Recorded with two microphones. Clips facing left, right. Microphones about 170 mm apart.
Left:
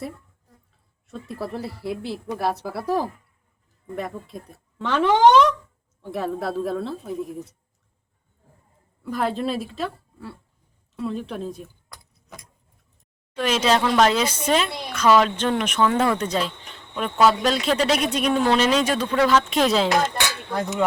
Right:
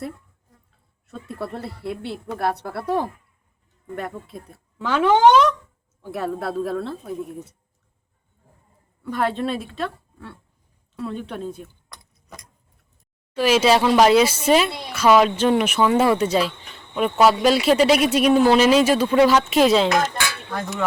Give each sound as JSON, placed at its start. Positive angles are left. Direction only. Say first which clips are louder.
{"t": 1.0, "sound": "speech", "louder": "even", "side_deg": 0}
{"t": 9.0, "sound": "speech", "louder": "right 1 dB", "side_deg": 0}
{"t": 13.3, "sound": "speech", "louder": "right 4 dB", "side_deg": -10}
{"t": 20.5, "sound": "speech", "louder": "left 3 dB", "side_deg": 20}